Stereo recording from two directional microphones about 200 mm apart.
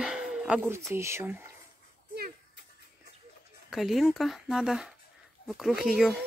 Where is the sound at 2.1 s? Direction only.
50° right (ahead or behind).